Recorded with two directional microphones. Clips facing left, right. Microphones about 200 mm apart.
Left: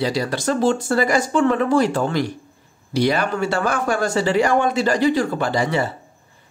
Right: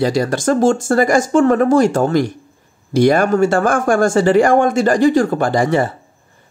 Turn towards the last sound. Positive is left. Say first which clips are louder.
# right 5 dB
turn(degrees=-50)  # may be behind; listen again after turning